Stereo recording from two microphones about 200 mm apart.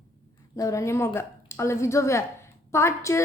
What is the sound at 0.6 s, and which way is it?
A woman's voice, 15° left (ahead or behind).